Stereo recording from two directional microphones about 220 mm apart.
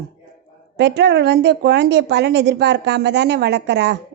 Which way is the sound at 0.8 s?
50° right (ahead or behind).